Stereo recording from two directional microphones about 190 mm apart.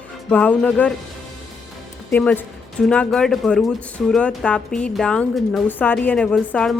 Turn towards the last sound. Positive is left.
turn(degrees=5)  # may be behind; listen again after turning